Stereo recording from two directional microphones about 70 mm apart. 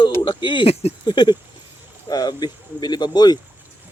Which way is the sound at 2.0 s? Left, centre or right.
Left.